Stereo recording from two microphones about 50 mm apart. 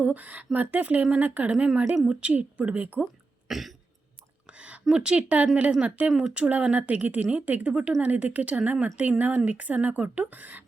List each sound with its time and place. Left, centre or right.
0.0 s speech: right
1.5 s speech: right
3.5 s cough: centre
4.4 s a sound: right
4.9 s speech: centre; by 10.6 s right